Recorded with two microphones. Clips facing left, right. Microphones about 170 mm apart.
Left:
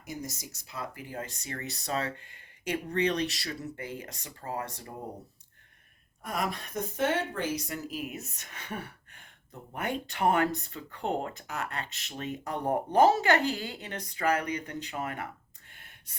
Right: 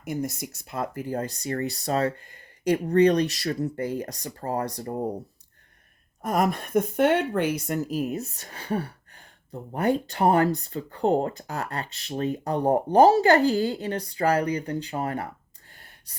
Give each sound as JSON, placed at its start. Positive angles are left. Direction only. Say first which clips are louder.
{"t": 0.0, "sound": "speech", "louder": "right 9 dB", "side_deg": -60}
{"t": 6.2, "sound": "speech", "louder": "right 9 dB", "side_deg": -45}
{"t": 15.7, "sound": "gasp", "louder": "right 3 dB", "side_deg": -35}